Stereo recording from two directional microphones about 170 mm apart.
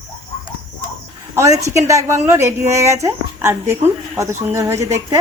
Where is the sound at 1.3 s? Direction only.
20° right (ahead or behind).